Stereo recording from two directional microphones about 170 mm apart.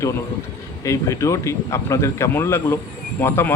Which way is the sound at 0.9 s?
20° left (ahead or behind).